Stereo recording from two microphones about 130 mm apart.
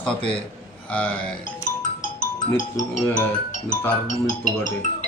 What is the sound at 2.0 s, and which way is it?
Music, 80° left.